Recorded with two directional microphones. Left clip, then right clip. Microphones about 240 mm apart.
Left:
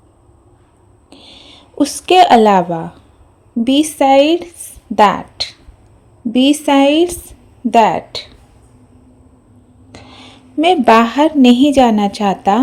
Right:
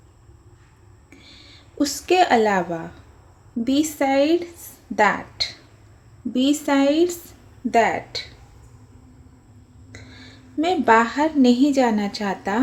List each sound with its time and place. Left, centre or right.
1.1 s a woman's voice: left
9.9 s a woman's voice: left